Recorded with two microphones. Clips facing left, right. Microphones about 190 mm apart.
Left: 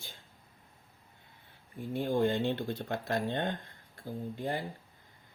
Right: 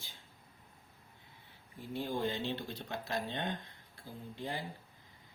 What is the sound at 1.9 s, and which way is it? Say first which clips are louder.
Speech: left 7 dB; 55° left (ahead or behind).